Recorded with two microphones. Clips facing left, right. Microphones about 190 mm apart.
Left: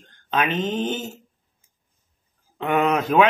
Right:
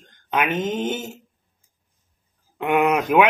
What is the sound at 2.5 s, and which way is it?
Speech, 10° right (ahead or behind).